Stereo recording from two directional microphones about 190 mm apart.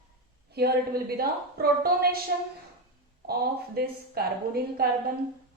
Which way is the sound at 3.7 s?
55° right (ahead or behind).